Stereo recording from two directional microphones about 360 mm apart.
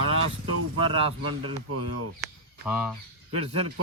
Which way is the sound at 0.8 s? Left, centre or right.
Centre.